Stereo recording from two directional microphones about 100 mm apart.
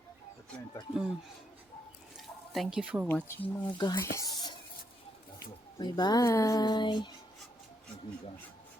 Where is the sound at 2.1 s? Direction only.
5° right (ahead or behind).